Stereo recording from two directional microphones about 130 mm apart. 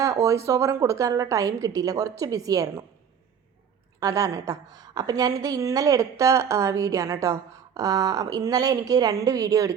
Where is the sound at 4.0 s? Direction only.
25° right (ahead or behind).